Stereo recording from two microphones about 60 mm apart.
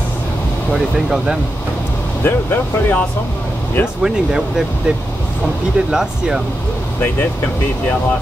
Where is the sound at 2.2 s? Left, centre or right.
Left.